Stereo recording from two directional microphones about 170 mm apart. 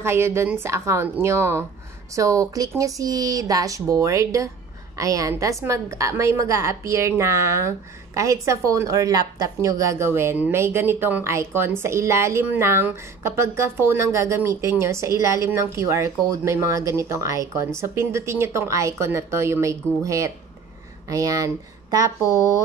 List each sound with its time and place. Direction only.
0.0 s a woman's voice: 15° right (ahead or behind)